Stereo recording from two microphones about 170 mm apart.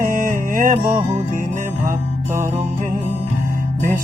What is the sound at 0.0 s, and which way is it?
Music, 55° right (ahead or behind).